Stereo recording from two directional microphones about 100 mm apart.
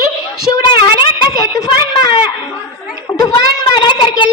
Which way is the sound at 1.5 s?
35° left (ahead or behind).